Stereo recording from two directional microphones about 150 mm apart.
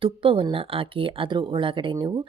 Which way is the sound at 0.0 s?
35° right (ahead or behind).